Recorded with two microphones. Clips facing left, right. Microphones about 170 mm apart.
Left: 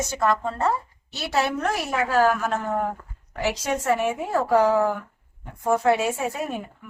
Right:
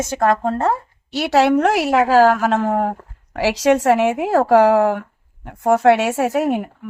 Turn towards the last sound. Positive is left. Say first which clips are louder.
# right 10 dB
turn(degrees=-85)